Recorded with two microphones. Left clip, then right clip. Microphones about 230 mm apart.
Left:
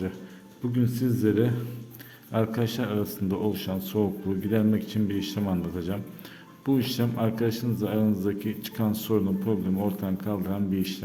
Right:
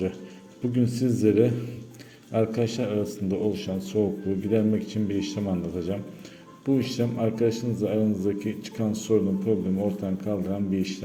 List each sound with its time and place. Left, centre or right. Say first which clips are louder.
0.8 s a man's voice: right 2 dB; centre